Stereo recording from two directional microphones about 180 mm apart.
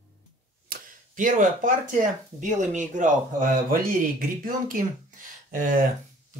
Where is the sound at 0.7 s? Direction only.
45° right (ahead or behind).